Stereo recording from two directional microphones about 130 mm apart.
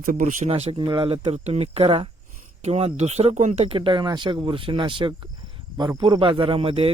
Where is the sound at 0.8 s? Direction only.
40° right (ahead or behind); by 3.7 s 60° right (ahead or behind).